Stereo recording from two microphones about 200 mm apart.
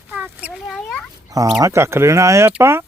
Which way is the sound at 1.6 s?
15° right (ahead or behind).